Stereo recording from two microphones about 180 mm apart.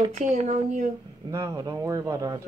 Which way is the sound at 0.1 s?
40° right (ahead or behind).